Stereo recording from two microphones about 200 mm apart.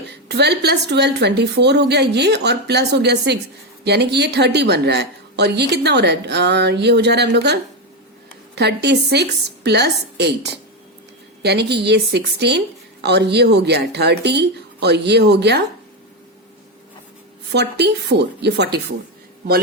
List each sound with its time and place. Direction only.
0.0 s a woman's voice: 55° right (ahead or behind)
17.5 s a woman's voice: 55° right (ahead or behind)